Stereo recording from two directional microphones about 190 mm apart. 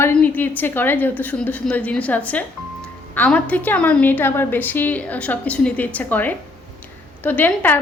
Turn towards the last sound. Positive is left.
turn(degrees=10)  # may be behind; listen again after turning